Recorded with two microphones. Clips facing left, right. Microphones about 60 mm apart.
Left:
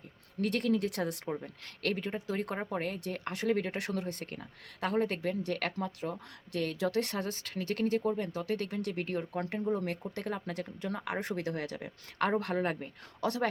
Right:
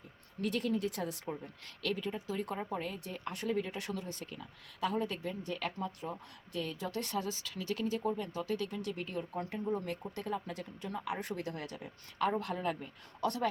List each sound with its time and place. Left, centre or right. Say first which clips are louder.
0.4 s speech: left 3 dB; left